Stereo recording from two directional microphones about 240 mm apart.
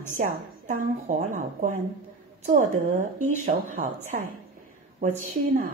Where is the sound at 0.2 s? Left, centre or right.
Right.